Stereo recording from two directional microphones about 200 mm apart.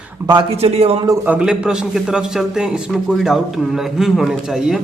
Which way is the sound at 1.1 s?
5° right (ahead or behind).